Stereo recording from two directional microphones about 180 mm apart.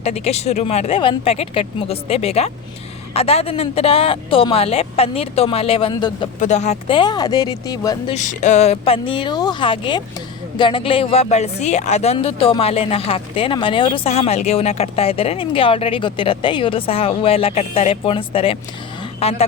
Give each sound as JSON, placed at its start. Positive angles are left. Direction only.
{"t": 0.0, "sound": "speech", "side_deg": 35}
{"t": 6.4, "sound": "speech", "side_deg": 40}
{"t": 8.1, "sound": "speech", "side_deg": 45}